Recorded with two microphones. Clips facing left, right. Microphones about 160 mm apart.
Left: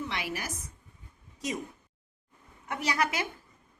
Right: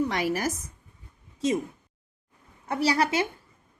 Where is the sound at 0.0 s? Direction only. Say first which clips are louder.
Right 9 dB; 40° right (ahead or behind).